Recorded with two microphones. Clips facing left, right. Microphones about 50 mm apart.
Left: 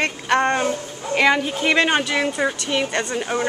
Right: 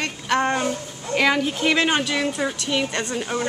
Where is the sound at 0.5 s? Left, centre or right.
Centre.